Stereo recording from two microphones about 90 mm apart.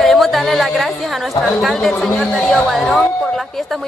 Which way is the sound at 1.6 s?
Centre (ahead or behind).